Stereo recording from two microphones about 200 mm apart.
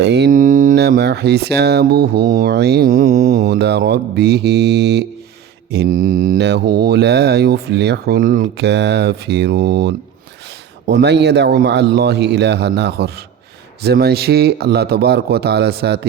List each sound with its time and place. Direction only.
0.0 s speech: 55° right (ahead or behind)